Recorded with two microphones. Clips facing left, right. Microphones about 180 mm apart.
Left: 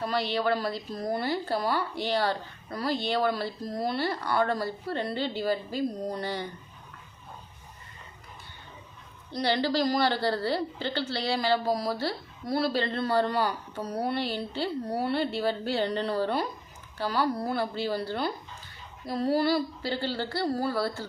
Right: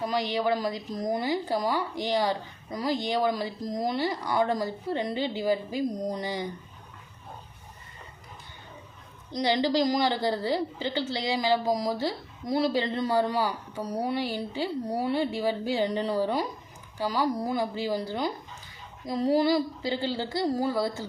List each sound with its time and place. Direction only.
0.0 s a woman's voice: 15° right (ahead or behind)
9.3 s a woman's voice: 15° right (ahead or behind)